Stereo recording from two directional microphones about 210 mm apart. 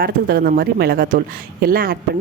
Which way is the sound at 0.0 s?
45° right (ahead or behind).